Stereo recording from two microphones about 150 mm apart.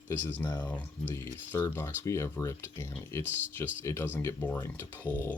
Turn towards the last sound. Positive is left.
turn(degrees=10)  # may be behind; listen again after turning